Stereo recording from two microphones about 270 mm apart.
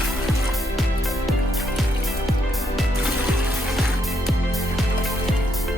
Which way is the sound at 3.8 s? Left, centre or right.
Centre.